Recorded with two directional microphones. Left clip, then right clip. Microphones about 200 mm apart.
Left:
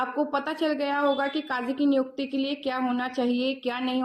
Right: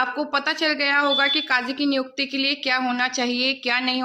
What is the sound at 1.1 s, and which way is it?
Speech, 35° right (ahead or behind).